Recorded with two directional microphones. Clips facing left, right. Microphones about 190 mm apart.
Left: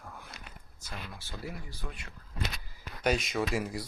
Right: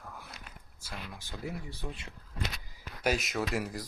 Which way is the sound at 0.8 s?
10° right (ahead or behind).